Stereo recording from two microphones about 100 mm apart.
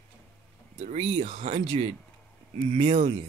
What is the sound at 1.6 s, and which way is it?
Speech, 75° right (ahead or behind).